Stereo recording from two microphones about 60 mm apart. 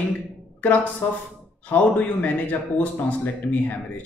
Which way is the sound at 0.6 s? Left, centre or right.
Left.